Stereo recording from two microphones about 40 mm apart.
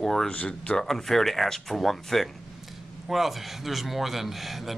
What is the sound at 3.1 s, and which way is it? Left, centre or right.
Speech, centre.